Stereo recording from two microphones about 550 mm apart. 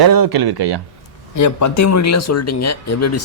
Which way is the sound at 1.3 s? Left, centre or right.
Left.